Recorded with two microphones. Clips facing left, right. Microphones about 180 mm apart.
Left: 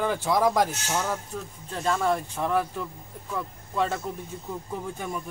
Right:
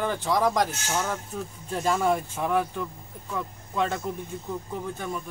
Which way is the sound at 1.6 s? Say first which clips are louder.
Right 1 dB; 10° right (ahead or behind).